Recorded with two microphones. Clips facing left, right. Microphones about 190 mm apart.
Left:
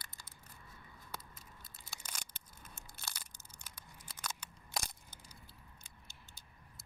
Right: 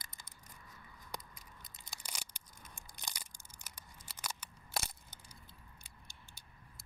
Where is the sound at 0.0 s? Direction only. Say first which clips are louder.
Even; 15° right (ahead or behind).